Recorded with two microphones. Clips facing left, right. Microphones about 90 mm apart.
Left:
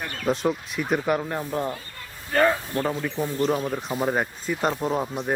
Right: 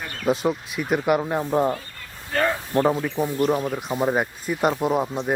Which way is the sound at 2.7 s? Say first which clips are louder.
Right 6 dB; 25° right (ahead or behind).